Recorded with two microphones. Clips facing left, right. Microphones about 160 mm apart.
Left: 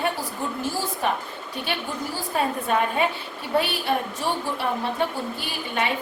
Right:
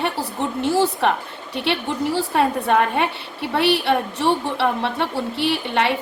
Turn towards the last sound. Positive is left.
turn(degrees=-75)  # may be behind; listen again after turning